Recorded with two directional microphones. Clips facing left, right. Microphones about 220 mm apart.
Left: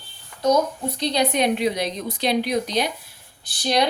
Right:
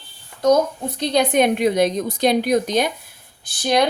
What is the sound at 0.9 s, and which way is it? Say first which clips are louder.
A woman's voice: right 5 dB; 50° right (ahead or behind).